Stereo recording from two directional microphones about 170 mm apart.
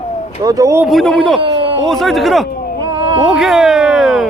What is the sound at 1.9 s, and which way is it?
Speech, centre (ahead or behind).